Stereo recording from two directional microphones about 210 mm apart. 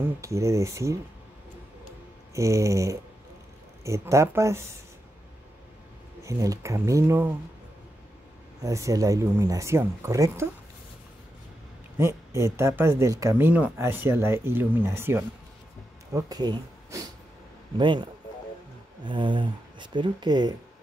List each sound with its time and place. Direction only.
0.0 s speech: 15° right (ahead or behind)
2.3 s speech: 15° right (ahead or behind)
6.2 s speech: 15° right (ahead or behind)
8.6 s speech: 15° right (ahead or behind)
12.0 s speech: 15° right (ahead or behind)